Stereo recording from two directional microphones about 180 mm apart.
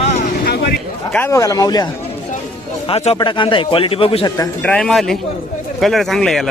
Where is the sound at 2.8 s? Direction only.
35° left (ahead or behind).